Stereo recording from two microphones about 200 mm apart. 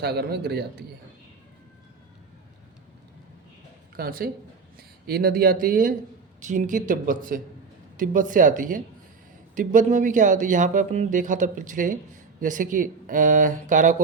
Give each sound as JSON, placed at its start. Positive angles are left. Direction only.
{"t": 0.0, "sound": "speech", "side_deg": -55}
{"t": 3.9, "sound": "speech", "side_deg": -45}